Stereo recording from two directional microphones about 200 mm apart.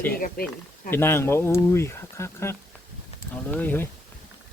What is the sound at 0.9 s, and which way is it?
Speech, 10° left (ahead or behind).